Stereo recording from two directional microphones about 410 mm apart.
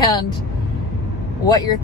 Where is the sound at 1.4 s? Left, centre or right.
Centre.